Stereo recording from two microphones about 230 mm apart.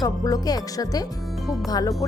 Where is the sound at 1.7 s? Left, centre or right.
Centre.